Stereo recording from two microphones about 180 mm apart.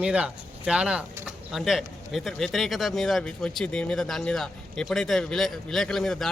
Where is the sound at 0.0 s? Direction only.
5° right (ahead or behind).